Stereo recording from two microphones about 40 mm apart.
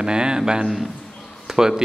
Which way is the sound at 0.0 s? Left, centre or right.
Centre.